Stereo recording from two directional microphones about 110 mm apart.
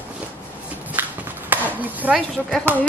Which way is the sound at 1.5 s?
15° right (ahead or behind).